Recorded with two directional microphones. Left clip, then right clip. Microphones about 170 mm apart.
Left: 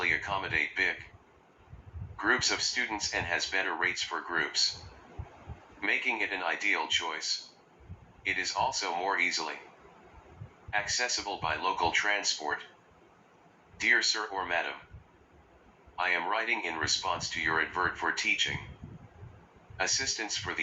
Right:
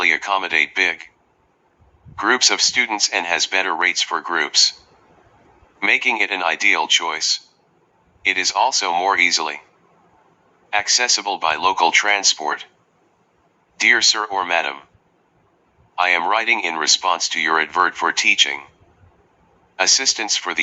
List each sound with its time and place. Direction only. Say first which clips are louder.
0.0 s speech: right 12 dB; 35° right (ahead or behind)
2.1 s speech: right 12 dB; 35° right (ahead or behind)
5.8 s speech: right 13 dB; 35° right (ahead or behind)
10.7 s speech: right 13 dB; 35° right (ahead or behind)
13.7 s speech: right 12 dB; 35° right (ahead or behind)
16.0 s speech: right 13 dB; 35° right (ahead or behind)
19.7 s speech: right 14 dB; 35° right (ahead or behind)